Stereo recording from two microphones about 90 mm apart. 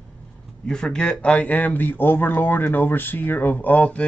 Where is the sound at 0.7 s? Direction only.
10° left (ahead or behind).